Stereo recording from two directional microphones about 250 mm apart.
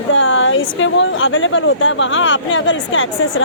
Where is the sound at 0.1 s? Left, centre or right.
Left.